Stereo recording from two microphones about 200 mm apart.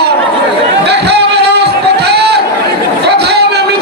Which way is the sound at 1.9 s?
55° right (ahead or behind).